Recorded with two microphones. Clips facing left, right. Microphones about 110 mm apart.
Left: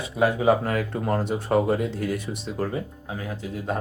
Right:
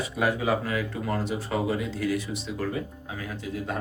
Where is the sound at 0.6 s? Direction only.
50° left (ahead or behind).